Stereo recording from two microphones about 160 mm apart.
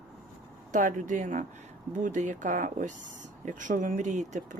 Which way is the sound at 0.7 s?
55° right (ahead or behind).